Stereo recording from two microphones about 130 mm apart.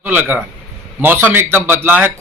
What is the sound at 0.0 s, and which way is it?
A man's voice, 15° right (ahead or behind).